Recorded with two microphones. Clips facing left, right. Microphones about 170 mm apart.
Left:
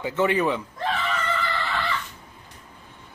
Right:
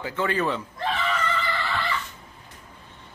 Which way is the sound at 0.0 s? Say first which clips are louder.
Left 3 dB; 20° left (ahead or behind).